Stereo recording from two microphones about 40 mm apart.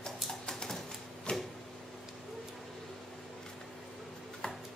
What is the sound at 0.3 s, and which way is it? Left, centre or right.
Typewriter, centre.